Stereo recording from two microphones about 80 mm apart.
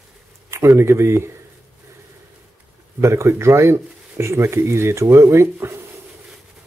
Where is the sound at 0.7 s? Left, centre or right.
Right.